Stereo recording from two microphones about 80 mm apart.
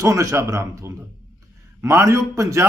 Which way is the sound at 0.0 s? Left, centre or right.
Right.